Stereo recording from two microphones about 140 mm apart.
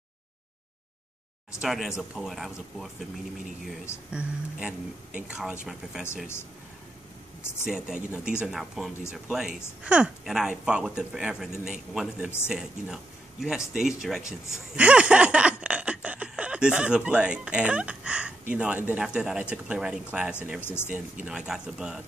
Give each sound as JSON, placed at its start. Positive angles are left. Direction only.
{"t": 1.6, "sound": "speech", "side_deg": -5}
{"t": 4.1, "sound": "speech", "side_deg": -5}
{"t": 7.6, "sound": "speech", "side_deg": -5}
{"t": 20.6, "sound": "speech", "side_deg": 15}
{"t": 20.9, "sound": "speech", "side_deg": -5}